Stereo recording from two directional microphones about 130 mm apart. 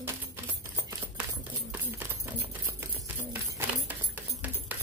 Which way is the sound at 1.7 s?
15° right (ahead or behind).